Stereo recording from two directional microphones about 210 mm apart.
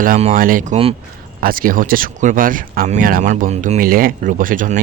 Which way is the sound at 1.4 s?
45° right (ahead or behind).